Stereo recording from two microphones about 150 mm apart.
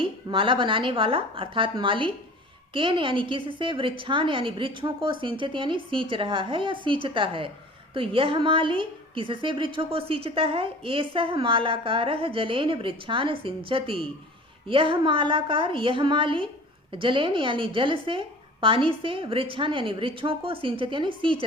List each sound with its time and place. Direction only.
0.0 s a woman's voice: 35° right (ahead or behind)